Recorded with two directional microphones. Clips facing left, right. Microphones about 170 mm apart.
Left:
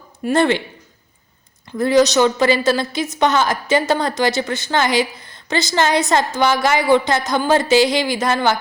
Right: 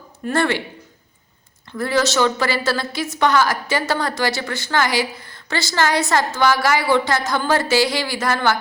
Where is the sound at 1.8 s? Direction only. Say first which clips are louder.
Left 5 dB; 20° left (ahead or behind).